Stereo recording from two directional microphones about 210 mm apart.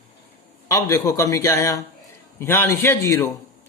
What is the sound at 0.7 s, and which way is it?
Speech, 15° left (ahead or behind).